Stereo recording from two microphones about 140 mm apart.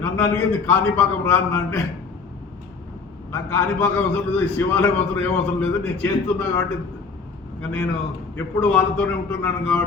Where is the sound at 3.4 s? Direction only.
15° left (ahead or behind).